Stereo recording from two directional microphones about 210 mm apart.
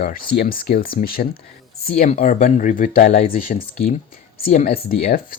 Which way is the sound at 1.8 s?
30° left (ahead or behind).